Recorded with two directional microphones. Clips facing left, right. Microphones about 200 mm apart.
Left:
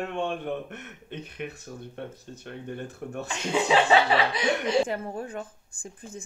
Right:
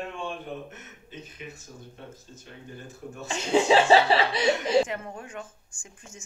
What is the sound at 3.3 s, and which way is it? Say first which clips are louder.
Speech: right 4 dB; 30° right (ahead or behind).